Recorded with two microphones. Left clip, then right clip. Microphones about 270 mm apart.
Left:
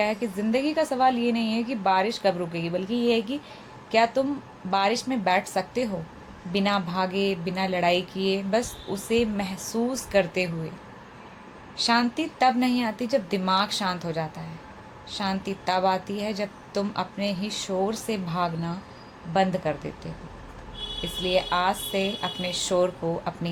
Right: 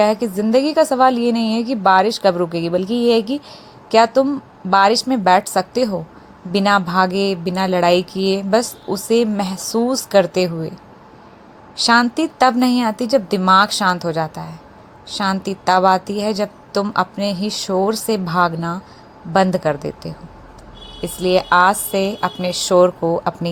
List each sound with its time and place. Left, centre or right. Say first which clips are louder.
0.0 s a woman's voice: right 10 dB; right
11.8 s a woman's voice: right 9 dB; right